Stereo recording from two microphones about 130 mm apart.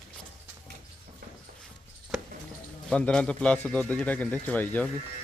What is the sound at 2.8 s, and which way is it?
A man's voice, 10° left (ahead or behind).